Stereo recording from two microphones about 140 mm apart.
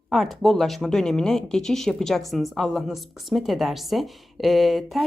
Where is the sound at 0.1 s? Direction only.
Centre (ahead or behind).